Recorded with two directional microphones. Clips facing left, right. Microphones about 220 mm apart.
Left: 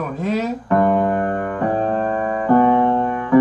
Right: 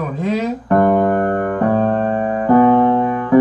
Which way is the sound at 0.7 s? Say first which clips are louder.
Right 3 dB; 45° right (ahead or behind).